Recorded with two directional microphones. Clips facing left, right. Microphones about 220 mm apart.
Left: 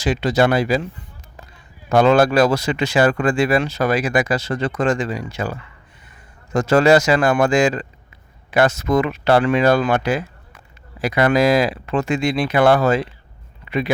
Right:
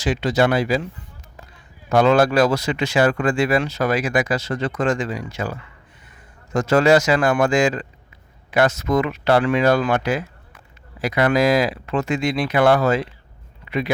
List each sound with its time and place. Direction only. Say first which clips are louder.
0.0 s speech: left 2 dB; 40° left (ahead or behind)
1.9 s speech: left 2 dB; 30° left (ahead or behind)